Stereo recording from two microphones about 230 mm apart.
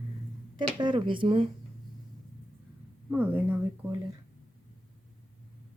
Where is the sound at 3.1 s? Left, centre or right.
Centre.